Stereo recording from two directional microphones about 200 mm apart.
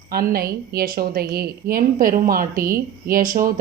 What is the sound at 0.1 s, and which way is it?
A woman's voice, 50° right (ahead or behind).